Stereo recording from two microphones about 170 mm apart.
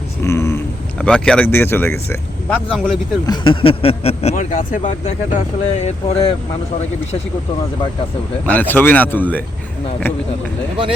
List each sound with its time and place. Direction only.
0.2 s a sound: 15° left (ahead or behind)
1.0 s speech: 5° left (ahead or behind)
2.5 s speech: centre (ahead or behind)
3.2 s speech: 30° left (ahead or behind)
8.4 s speech: 10° left (ahead or behind)